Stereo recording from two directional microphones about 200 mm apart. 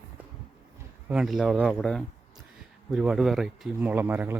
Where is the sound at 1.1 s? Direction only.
5° right (ahead or behind).